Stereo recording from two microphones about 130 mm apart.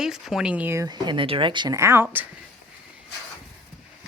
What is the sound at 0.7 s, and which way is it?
Speech, 30° right (ahead or behind).